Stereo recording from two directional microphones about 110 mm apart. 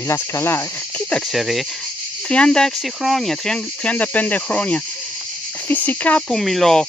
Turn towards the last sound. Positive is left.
turn(degrees=5)  # may be behind; listen again after turning